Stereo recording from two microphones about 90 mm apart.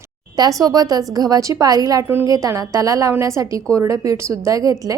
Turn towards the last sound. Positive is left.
turn(degrees=-40)  # may be behind; listen again after turning